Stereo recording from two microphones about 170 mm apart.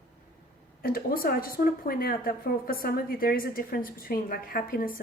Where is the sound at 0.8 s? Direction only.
60° left (ahead or behind).